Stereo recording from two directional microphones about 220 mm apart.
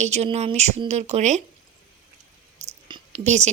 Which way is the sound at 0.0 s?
30° right (ahead or behind).